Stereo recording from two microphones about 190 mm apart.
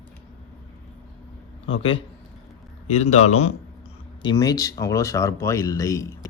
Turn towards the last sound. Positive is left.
turn(degrees=15)  # may be behind; listen again after turning